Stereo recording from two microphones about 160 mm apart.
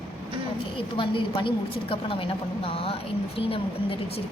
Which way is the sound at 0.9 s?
30° left (ahead or behind).